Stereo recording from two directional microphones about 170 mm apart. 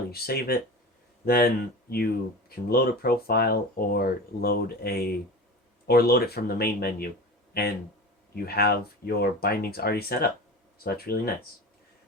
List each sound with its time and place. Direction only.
0.1 s speech: 65° left (ahead or behind)